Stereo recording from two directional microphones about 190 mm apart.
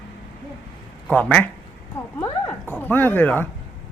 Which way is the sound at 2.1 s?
15° left (ahead or behind).